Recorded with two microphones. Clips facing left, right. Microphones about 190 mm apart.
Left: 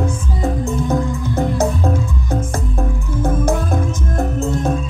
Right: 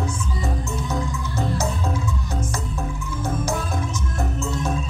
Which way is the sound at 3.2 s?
55° left (ahead or behind).